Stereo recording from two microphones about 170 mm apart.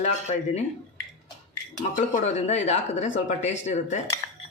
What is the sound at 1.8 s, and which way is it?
Speech, 45° left (ahead or behind).